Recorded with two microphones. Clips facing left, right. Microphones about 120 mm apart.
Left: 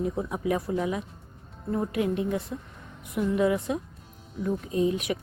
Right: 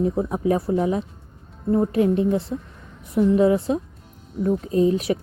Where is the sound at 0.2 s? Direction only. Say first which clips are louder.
Right 6 dB; 30° right (ahead or behind).